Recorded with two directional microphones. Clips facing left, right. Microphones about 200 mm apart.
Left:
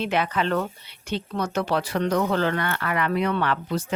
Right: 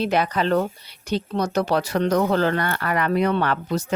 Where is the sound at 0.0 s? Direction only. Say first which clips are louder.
Right 3 dB; 40° right (ahead or behind).